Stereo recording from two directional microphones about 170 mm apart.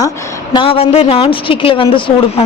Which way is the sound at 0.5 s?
30° left (ahead or behind).